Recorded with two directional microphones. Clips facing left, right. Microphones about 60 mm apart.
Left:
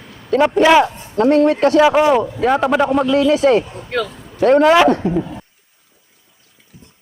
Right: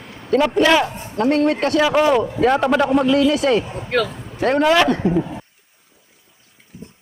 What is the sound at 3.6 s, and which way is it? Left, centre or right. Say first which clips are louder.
Speech: right 3 dB; centre.